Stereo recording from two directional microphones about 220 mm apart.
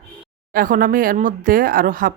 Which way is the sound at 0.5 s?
40° right (ahead or behind).